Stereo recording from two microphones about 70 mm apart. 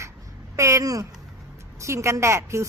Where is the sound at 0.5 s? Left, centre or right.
Right.